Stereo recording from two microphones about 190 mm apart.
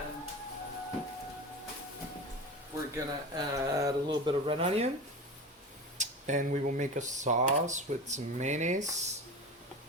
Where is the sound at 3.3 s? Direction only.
15° right (ahead or behind).